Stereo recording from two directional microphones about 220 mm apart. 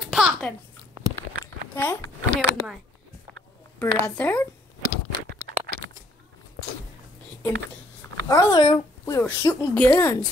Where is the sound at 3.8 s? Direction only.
10° left (ahead or behind).